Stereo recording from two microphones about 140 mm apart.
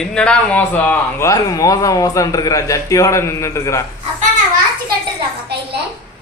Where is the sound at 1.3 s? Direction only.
25° left (ahead or behind).